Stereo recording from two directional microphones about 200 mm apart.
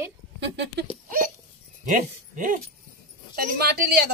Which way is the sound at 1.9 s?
40° right (ahead or behind).